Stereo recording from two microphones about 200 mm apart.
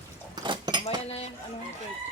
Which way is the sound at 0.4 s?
20° right (ahead or behind).